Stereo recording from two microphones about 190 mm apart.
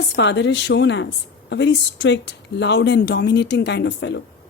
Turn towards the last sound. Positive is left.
turn(degrees=70)  # may be behind; listen again after turning